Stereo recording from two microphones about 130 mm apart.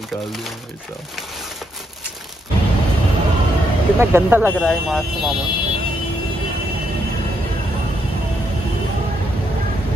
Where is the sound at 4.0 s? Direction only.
15° right (ahead or behind).